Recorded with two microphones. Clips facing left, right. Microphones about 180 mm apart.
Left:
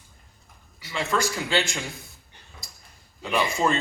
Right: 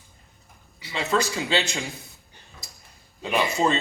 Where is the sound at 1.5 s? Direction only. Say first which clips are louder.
Even; 20° right (ahead or behind).